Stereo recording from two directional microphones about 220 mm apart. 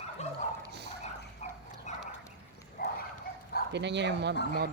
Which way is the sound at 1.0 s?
35° left (ahead or behind).